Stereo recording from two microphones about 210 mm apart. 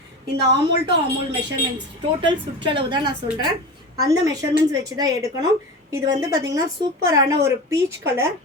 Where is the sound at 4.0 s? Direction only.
15° right (ahead or behind).